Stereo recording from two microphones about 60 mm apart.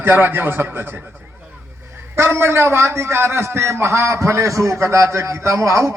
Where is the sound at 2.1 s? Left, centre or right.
Right.